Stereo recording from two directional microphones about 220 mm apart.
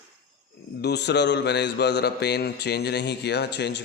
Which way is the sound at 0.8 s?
50° left (ahead or behind).